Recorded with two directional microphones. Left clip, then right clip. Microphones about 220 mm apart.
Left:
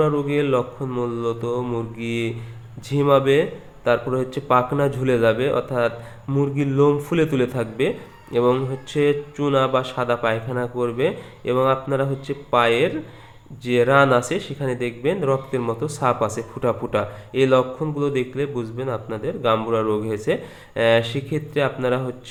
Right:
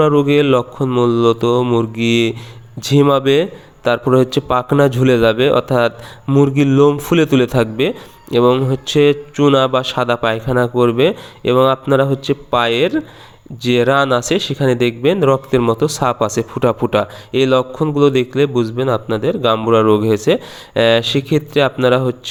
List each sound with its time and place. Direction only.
0.0 s a man's voice: 40° right (ahead or behind)